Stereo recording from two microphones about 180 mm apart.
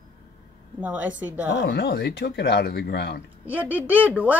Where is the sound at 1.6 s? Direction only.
65° left (ahead or behind).